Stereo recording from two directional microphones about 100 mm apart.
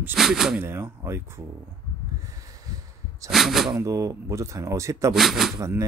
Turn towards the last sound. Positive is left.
turn(degrees=-30)  # may be behind; listen again after turning